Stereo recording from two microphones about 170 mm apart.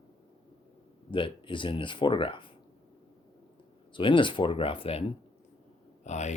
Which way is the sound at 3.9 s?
30° left (ahead or behind).